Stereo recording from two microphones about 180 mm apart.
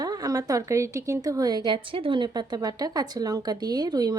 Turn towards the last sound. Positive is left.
turn(degrees=-20)  # may be behind; listen again after turning